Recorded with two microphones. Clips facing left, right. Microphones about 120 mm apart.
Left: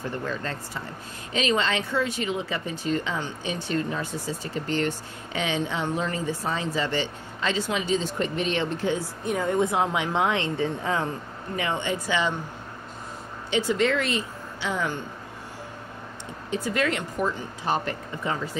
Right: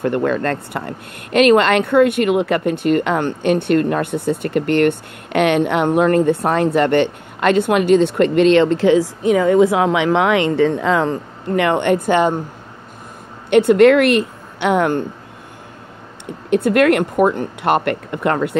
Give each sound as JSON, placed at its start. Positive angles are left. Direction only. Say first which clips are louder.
{"t": 0.0, "sound": "speech", "louder": "right 13 dB", "side_deg": -65}
{"t": 13.5, "sound": "speech", "louder": "right 14 dB", "side_deg": -60}
{"t": 16.3, "sound": "speech", "louder": "right 13 dB", "side_deg": -60}